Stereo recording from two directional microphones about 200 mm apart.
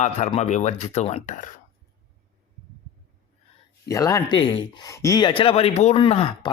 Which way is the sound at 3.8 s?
15° left (ahead or behind).